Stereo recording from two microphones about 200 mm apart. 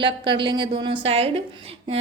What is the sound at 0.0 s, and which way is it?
A woman's voice, 25° right (ahead or behind).